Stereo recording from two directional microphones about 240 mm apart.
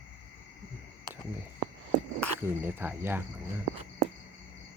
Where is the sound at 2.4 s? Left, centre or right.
Centre.